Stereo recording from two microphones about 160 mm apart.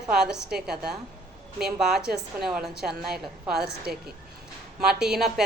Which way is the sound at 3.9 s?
75° right (ahead or behind).